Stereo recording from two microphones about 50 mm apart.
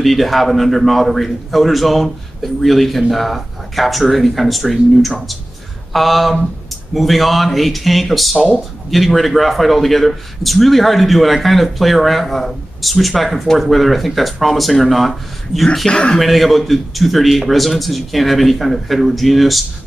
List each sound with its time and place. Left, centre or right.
0.0 s a man's voice: centre
15.9 s speech: centre
16.2 s a man's voice: centre